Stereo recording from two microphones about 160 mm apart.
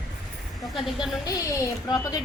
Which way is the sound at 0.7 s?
Centre (ahead or behind).